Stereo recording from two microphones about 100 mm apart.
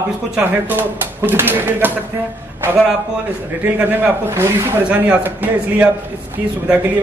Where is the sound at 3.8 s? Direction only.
20° right (ahead or behind).